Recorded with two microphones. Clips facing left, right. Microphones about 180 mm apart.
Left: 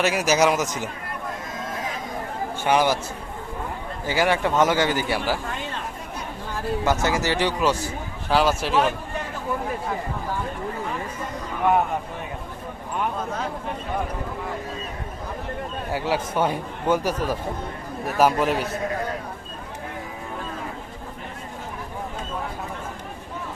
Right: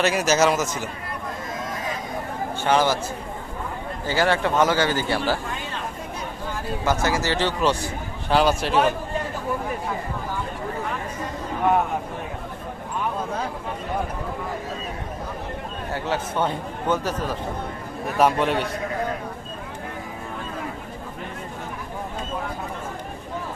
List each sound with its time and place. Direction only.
0.0 s speech: 10° left (ahead or behind)
2.6 s speech: 15° left (ahead or behind)
4.0 s speech: 15° left (ahead or behind)
7.0 s a man's voice: 20° left (ahead or behind); by 8.9 s centre (ahead or behind)
15.9 s a man's voice: 10° left (ahead or behind)